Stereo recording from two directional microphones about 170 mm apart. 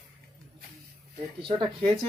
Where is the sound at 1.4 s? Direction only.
30° right (ahead or behind).